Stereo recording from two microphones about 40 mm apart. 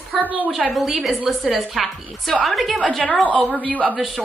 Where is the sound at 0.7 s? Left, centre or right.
Centre.